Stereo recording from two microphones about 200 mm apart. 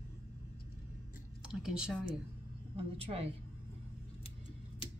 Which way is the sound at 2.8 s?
30° right (ahead or behind).